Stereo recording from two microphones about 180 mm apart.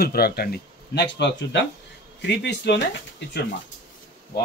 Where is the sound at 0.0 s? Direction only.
60° left (ahead or behind).